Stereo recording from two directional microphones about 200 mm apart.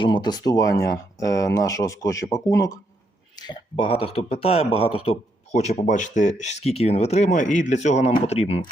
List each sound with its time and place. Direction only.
0.0 s a man's voice: 20° left (ahead or behind)